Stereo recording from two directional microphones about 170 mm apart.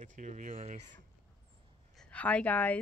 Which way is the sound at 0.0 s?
45° right (ahead or behind).